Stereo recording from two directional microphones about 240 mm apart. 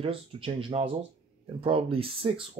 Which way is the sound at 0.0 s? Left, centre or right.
Right.